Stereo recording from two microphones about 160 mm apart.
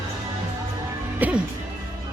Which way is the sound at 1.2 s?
10° right (ahead or behind).